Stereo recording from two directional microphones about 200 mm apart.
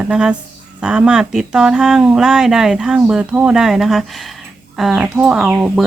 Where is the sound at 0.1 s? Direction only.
5° right (ahead or behind).